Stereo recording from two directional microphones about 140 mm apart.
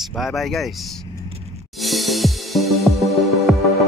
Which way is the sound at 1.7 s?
Centre (ahead or behind).